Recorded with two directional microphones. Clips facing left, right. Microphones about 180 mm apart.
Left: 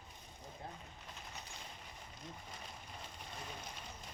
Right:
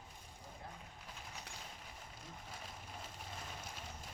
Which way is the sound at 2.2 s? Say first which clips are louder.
Left 2 dB; 5° right (ahead or behind).